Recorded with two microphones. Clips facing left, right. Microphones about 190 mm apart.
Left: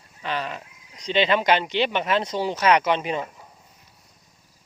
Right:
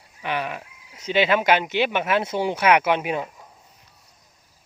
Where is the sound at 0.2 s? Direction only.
15° right (ahead or behind).